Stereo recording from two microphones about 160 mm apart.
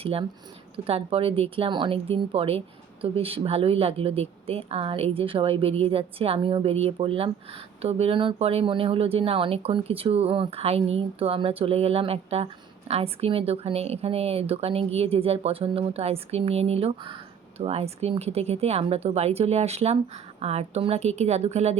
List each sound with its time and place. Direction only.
0.0 s speech: 35° right (ahead or behind)